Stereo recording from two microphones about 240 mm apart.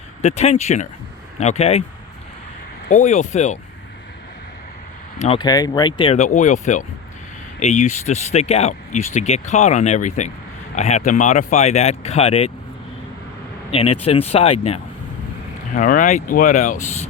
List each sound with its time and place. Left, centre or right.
0.2 s speech: left
2.9 s speech: left
5.2 s speech: left
13.7 s speech: left